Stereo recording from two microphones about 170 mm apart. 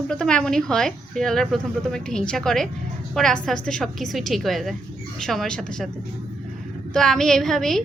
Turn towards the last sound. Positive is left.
turn(degrees=0)  # may be behind; listen again after turning